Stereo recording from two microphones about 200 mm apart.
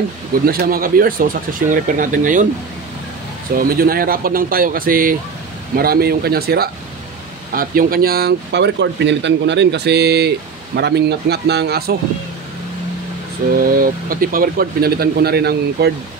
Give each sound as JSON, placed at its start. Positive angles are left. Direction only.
{"t": 0.5, "sound": "speech", "side_deg": -45}
{"t": 3.5, "sound": "speech", "side_deg": -45}
{"t": 13.6, "sound": "speech", "side_deg": -45}